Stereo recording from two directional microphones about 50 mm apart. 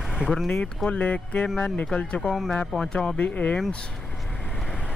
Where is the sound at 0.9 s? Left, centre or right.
Left.